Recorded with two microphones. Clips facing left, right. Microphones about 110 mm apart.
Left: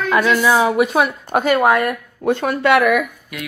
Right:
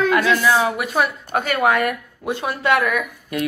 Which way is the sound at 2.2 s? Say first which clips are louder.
Left 8 dB; 55° left (ahead or behind).